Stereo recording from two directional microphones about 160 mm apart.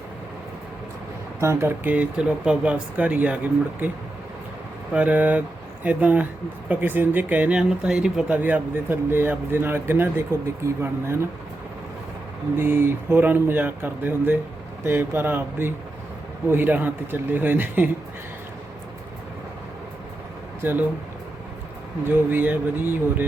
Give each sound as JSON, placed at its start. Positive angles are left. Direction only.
{"t": 1.4, "sound": "speech", "side_deg": -15}
{"t": 4.9, "sound": "speech", "side_deg": -10}
{"t": 12.5, "sound": "speech", "side_deg": -15}
{"t": 20.6, "sound": "speech", "side_deg": -10}
{"t": 22.0, "sound": "speech", "side_deg": -10}